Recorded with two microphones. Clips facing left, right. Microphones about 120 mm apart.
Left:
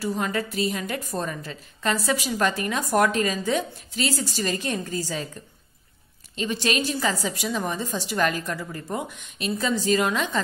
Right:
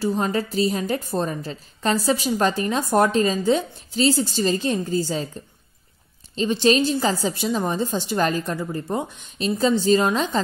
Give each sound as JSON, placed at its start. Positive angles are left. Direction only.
{"t": 0.0, "sound": "a woman's voice", "side_deg": -30}
{"t": 6.3, "sound": "a woman's voice", "side_deg": -30}